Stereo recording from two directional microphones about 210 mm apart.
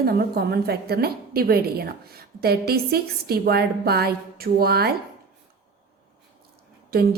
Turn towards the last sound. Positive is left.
turn(degrees=-45)  # may be behind; listen again after turning